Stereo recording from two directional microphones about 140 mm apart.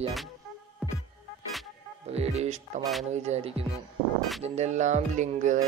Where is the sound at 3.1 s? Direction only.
55° right (ahead or behind).